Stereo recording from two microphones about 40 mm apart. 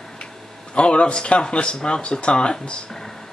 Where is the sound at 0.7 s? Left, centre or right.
Left.